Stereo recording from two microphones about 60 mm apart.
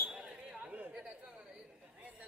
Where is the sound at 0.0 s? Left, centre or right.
Centre.